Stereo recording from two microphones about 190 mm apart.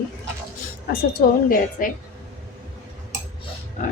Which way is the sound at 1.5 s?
45° left (ahead or behind).